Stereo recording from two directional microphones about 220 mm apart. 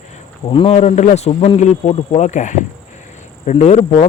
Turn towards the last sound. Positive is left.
turn(degrees=30)  # may be behind; listen again after turning